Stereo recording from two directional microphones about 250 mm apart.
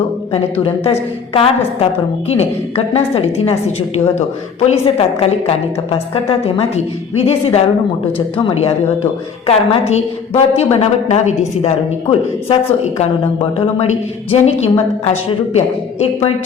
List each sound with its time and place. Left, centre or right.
0.6 s a woman's voice: left